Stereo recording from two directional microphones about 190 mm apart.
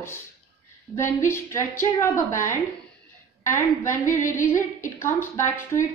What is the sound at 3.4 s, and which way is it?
Speech, 15° left (ahead or behind).